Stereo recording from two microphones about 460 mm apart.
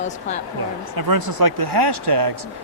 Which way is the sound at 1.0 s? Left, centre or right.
Right.